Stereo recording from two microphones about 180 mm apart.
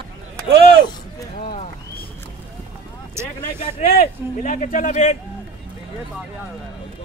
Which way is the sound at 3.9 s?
45° left (ahead or behind).